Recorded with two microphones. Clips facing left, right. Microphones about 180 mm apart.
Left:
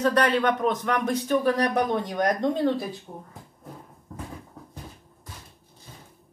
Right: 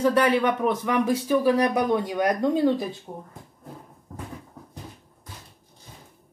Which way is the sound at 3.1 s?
45° right (ahead or behind).